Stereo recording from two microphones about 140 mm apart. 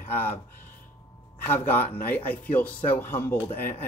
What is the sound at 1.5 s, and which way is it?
Speech, 15° left (ahead or behind).